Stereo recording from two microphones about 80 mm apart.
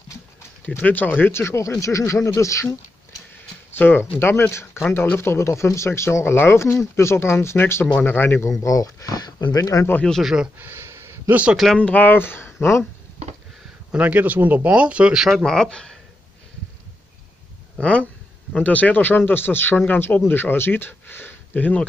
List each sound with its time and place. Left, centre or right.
0.7 s speech: left
1.3 s speech: left
3.7 s speech: left
8.5 s speech: left
10.2 s speech: centre
10.6 s a sound: right
11.7 s speech: centre
13.9 s speech: centre
15.2 s speech: centre
17.7 s speech: centre